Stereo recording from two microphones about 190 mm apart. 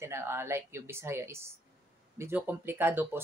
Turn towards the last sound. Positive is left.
turn(degrees=-10)  # may be behind; listen again after turning